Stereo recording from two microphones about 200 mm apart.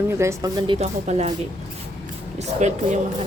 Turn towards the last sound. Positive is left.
turn(degrees=-35)  # may be behind; listen again after turning